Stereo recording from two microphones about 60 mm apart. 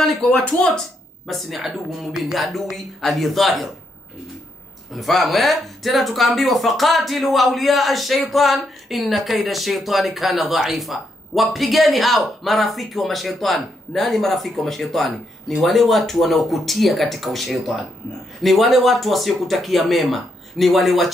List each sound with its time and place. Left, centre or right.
0.2 s speech: centre
1.2 s speech: centre
4.9 s speech: centre